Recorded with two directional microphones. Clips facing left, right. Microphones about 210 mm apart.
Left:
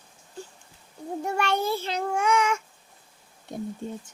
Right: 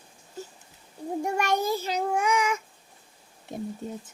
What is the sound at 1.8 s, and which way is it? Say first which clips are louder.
Child singing: right 1 dB; 10° right (ahead or behind).